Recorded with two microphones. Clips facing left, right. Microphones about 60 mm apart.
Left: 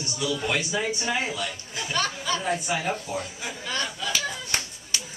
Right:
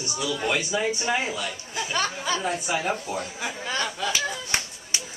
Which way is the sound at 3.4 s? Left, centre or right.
Right.